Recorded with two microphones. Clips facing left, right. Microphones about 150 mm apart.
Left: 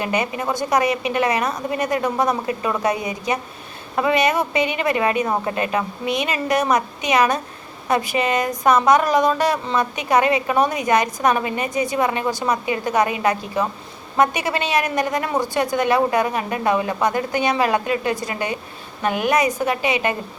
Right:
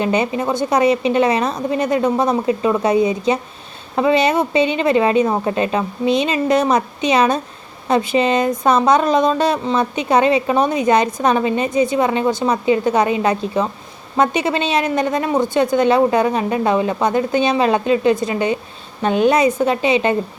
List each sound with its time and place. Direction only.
0.0 s speech: 25° right (ahead or behind)